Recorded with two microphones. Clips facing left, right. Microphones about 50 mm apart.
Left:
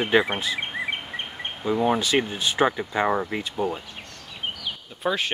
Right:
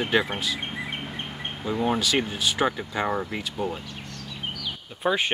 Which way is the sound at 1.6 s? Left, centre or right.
Centre.